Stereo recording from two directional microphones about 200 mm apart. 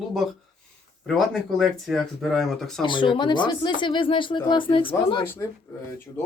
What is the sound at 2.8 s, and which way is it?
Speech, 25° left (ahead or behind).